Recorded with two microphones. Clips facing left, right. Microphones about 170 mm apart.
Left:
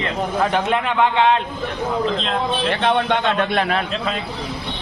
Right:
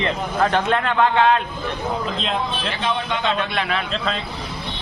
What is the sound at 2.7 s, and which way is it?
A man's voice, 60° left (ahead or behind).